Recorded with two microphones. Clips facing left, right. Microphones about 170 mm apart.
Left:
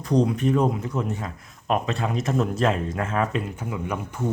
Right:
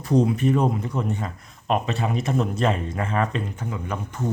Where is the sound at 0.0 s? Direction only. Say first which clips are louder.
Right 1 dB; 5° right (ahead or behind).